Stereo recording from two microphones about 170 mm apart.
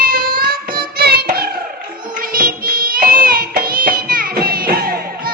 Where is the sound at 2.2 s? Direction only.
55° right (ahead or behind).